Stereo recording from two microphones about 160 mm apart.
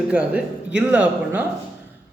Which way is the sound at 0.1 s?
5° right (ahead or behind).